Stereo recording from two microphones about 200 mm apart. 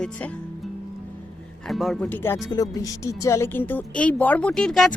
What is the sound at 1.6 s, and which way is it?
Speech, centre (ahead or behind).